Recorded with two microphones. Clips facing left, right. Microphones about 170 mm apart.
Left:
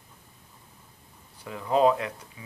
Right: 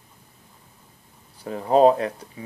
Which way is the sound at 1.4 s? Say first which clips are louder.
Right 6 dB; 40° right (ahead or behind).